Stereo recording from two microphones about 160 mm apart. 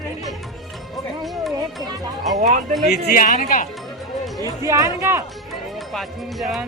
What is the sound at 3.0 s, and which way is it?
Speech, 65° left (ahead or behind).